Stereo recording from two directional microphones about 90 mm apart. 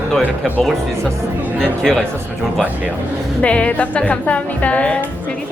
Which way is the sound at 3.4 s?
15° left (ahead or behind).